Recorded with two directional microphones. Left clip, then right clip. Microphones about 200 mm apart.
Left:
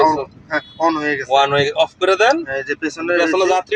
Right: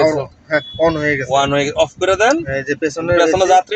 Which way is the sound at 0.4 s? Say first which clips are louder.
Right 3 dB; 20° right (ahead or behind).